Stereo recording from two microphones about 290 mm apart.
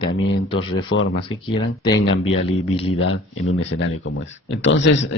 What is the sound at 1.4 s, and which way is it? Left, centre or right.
Speech, centre.